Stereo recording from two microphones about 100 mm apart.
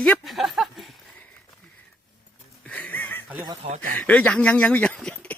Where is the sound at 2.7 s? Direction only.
15° left (ahead or behind).